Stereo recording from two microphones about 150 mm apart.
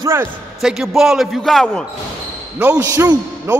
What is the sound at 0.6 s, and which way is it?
A man's voice, 5° right (ahead or behind).